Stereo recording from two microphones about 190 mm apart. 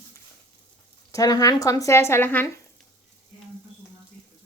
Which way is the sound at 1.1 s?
20° left (ahead or behind).